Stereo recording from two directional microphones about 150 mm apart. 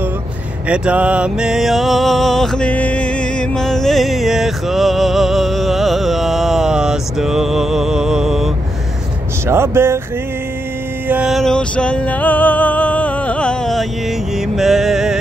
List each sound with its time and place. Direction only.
0.7 s music: 10° right (ahead or behind)
9.5 s speech: 15° right (ahead or behind)
11.1 s music: 5° right (ahead or behind)